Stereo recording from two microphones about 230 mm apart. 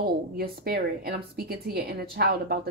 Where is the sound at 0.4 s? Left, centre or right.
Right.